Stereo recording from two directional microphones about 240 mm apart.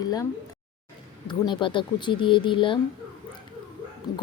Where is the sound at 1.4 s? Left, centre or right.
Centre.